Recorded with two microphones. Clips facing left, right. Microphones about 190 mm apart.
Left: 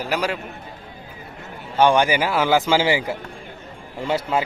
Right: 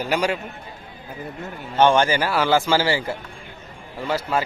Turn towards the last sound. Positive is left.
turn(degrees=20)  # may be behind; listen again after turning